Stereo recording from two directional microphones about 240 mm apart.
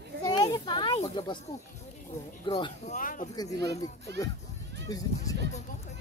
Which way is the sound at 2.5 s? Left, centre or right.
Left.